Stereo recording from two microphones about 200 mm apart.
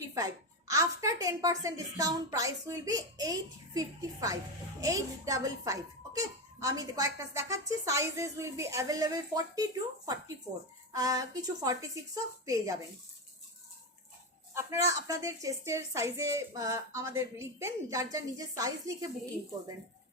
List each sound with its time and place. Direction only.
0.7 s speech: 15° right (ahead or behind)
10.9 s speech: 15° right (ahead or behind)
14.5 s speech: 15° right (ahead or behind)